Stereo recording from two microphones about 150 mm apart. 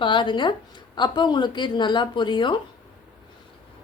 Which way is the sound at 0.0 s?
30° left (ahead or behind).